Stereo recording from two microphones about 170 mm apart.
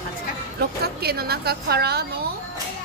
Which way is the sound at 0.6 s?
65° right (ahead or behind).